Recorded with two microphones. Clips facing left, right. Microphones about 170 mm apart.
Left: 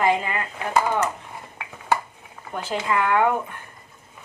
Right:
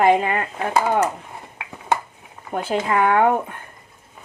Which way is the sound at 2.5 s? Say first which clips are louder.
Right 4 dB; 50° right (ahead or behind).